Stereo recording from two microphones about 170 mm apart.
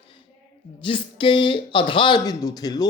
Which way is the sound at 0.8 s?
30° left (ahead or behind).